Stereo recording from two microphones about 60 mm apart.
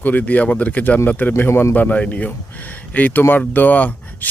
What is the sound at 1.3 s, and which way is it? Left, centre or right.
Speech, left.